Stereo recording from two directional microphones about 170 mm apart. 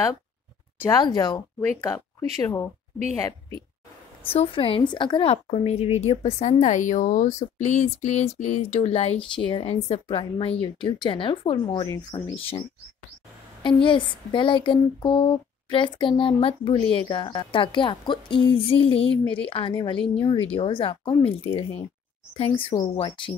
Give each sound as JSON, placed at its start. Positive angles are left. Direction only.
{"t": 0.8, "sound": "speech", "side_deg": 25}
{"t": 4.2, "sound": "a woman's voice", "side_deg": 30}